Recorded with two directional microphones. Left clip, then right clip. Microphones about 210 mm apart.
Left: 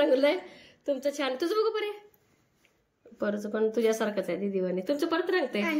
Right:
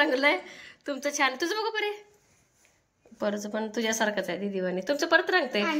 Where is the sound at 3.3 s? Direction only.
5° left (ahead or behind).